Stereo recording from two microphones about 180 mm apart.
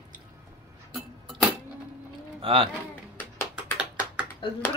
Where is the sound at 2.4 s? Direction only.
30° right (ahead or behind).